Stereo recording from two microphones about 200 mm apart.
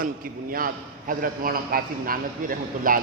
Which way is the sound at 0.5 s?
45° right (ahead or behind).